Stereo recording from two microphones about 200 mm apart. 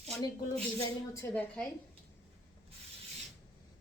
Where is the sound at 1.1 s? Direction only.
10° left (ahead or behind).